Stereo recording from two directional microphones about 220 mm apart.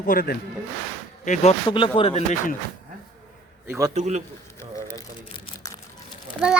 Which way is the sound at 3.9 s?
30° right (ahead or behind).